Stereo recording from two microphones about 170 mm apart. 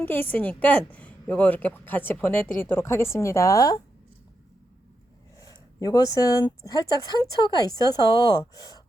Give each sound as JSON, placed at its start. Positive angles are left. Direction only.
{"t": 0.0, "sound": "a woman's voice", "side_deg": 10}
{"t": 5.4, "sound": "speech", "side_deg": 20}